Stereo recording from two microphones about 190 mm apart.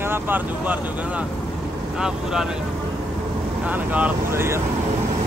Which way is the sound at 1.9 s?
5° right (ahead or behind).